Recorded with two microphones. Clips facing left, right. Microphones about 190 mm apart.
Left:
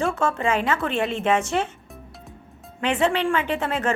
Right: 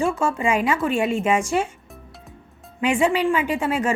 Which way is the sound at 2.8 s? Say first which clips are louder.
Right 2 dB; 10° right (ahead or behind).